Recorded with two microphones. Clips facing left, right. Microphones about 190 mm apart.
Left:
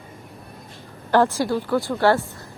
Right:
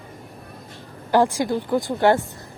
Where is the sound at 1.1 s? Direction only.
15° right (ahead or behind).